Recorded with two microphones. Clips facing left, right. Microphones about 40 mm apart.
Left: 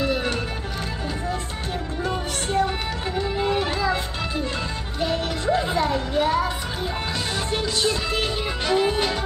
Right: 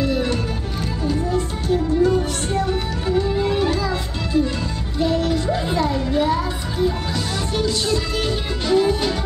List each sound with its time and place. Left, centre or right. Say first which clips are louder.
0.0 s music: right 3 dB; centre
1.3 s music: right 8 dB; left
7.6 s music: right 3 dB; left